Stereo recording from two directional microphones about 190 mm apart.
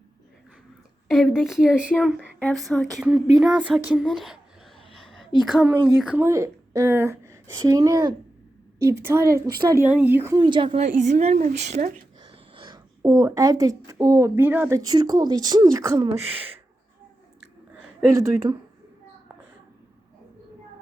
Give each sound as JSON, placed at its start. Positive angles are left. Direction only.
{"t": 1.0, "sound": "a woman's voice", "side_deg": 0}
{"t": 4.9, "sound": "a sound", "side_deg": 0}
{"t": 6.0, "sound": "a woman's voice", "side_deg": -10}
{"t": 10.3, "sound": "speech", "side_deg": -25}
{"t": 10.7, "sound": "a woman's voice", "side_deg": -40}
{"t": 12.2, "sound": "a sound", "side_deg": -25}
{"t": 13.0, "sound": "speech", "side_deg": -15}
{"t": 16.1, "sound": "a woman's voice", "side_deg": -30}
{"t": 18.1, "sound": "a woman's voice", "side_deg": -15}